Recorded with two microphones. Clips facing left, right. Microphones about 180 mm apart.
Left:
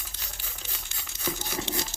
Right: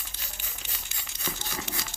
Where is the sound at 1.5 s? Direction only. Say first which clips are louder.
Left 5 dB; 25° left (ahead or behind).